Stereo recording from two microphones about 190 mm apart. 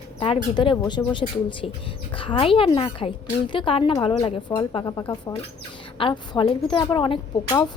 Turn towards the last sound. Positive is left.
turn(degrees=20)  # may be behind; listen again after turning